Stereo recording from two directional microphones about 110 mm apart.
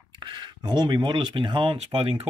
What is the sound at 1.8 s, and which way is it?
Speech, 60° right (ahead or behind).